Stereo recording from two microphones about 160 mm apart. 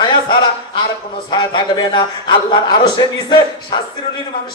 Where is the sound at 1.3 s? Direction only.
30° left (ahead or behind).